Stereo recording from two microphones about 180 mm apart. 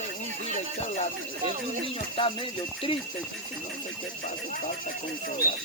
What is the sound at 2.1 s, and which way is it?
Speech, 30° left (ahead or behind).